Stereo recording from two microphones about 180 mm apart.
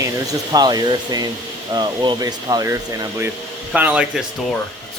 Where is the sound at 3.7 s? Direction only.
5° right (ahead or behind).